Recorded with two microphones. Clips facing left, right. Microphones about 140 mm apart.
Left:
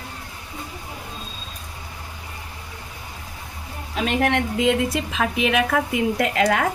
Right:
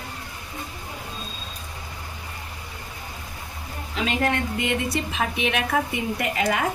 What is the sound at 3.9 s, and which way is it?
A woman's voice, 65° left (ahead or behind).